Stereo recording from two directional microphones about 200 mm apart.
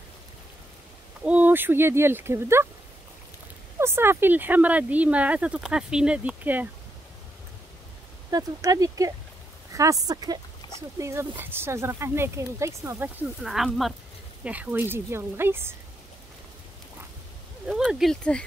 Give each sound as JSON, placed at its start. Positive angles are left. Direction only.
{"t": 1.2, "sound": "speech", "side_deg": -10}
{"t": 3.8, "sound": "speech", "side_deg": -10}
{"t": 8.3, "sound": "speech", "side_deg": -20}
{"t": 13.4, "sound": "speech", "side_deg": 0}
{"t": 17.6, "sound": "speech", "side_deg": -5}